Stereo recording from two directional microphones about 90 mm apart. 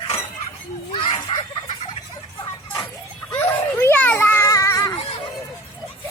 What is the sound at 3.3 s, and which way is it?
Children playing, 25° left (ahead or behind).